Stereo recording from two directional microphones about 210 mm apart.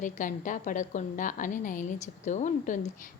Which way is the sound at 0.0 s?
40° left (ahead or behind).